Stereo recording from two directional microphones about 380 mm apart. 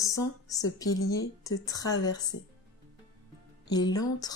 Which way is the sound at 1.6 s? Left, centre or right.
Centre.